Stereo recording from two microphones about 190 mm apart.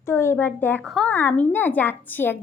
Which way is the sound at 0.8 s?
Centre (ahead or behind).